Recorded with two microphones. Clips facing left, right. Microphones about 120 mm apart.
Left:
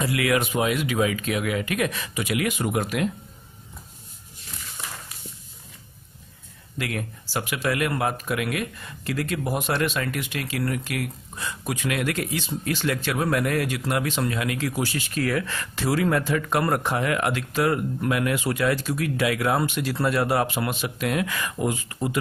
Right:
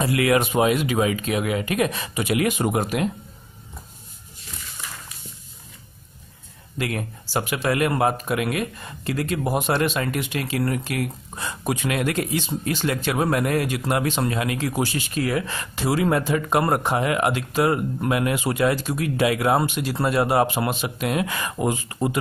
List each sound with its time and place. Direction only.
0.0 s speech: 30° right (ahead or behind)
6.8 s speech: 30° right (ahead or behind)